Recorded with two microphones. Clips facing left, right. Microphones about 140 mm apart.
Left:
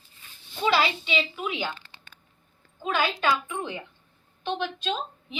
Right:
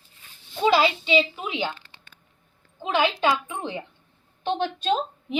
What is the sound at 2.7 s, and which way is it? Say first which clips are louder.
A woman's voice: right 3 dB; 25° right (ahead or behind).